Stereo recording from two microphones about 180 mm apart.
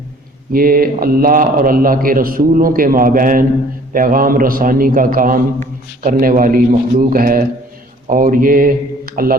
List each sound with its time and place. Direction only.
0.5 s a man's voice: 55° right (ahead or behind)